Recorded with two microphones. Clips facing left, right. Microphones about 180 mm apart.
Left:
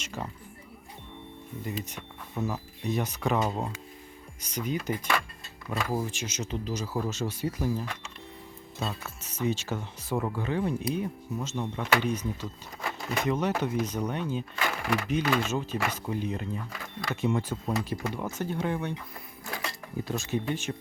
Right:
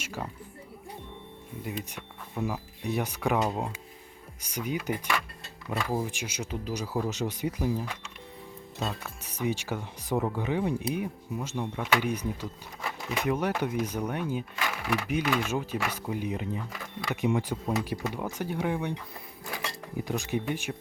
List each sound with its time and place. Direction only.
0.0 s speech: 10° right (ahead or behind)
1.8 s speech: 10° right (ahead or behind)
20.1 s speech: 15° right (ahead or behind)